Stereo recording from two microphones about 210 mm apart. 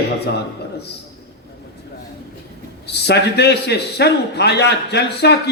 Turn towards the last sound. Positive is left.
turn(degrees=50)  # may be behind; listen again after turning